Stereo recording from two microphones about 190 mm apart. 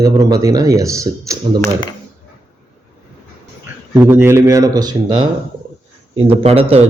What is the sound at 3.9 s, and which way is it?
Speech, 10° right (ahead or behind).